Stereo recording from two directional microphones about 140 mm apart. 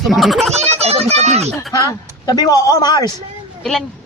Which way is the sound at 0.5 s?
50° right (ahead or behind).